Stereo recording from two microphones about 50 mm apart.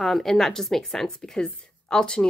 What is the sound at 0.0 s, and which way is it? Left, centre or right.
A woman's voice, centre.